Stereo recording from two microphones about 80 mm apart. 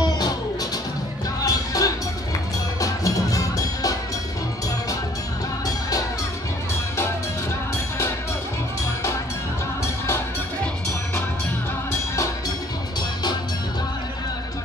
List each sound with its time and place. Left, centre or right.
1.4 s music: left
5.7 s music: left
11.9 s music: left